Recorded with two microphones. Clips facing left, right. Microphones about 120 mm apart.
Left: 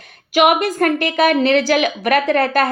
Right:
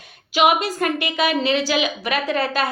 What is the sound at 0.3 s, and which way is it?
A woman's voice, 50° left (ahead or behind).